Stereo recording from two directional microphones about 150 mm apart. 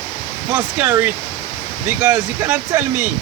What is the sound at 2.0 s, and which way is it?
Speech, 20° right (ahead or behind).